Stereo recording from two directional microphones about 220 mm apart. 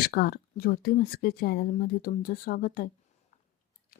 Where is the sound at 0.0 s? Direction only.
45° left (ahead or behind).